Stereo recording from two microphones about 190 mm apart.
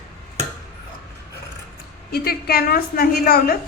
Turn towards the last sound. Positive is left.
turn(degrees=50)  # may be behind; listen again after turning